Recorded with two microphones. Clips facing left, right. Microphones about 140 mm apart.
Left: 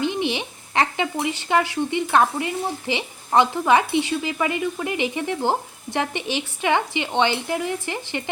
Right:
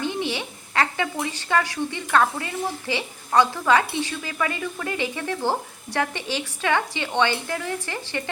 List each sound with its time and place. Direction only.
0.0 s speech: 20° left (ahead or behind)